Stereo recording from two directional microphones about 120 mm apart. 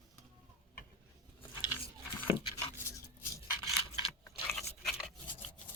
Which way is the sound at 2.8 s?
25° left (ahead or behind).